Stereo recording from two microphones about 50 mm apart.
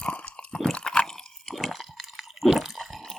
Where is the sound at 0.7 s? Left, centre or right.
Left.